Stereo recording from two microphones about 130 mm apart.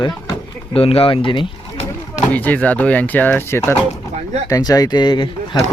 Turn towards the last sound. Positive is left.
turn(degrees=35)  # may be behind; listen again after turning